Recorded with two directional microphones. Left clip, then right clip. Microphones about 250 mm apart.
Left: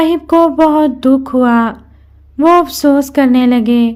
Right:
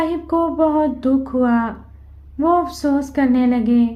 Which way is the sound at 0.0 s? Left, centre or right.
Left.